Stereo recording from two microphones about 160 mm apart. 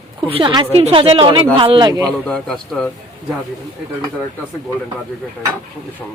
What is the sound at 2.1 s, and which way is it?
Speech, 5° left (ahead or behind).